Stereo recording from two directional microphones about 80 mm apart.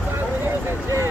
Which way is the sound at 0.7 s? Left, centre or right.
Right.